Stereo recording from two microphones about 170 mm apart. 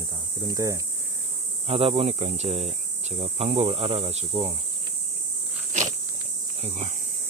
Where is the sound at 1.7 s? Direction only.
35° right (ahead or behind).